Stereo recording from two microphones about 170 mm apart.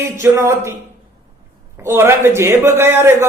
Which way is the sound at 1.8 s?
15° right (ahead or behind).